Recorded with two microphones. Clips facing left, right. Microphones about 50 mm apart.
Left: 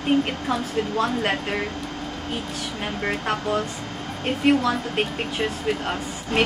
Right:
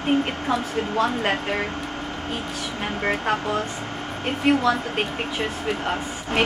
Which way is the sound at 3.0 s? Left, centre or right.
Centre.